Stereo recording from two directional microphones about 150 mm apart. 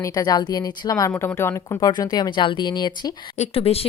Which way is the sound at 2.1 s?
30° left (ahead or behind).